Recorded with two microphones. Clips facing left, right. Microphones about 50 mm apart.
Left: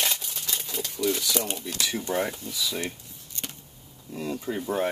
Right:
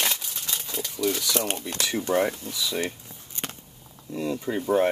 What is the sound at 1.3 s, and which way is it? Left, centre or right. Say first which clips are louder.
Speech: right 2 dB; right.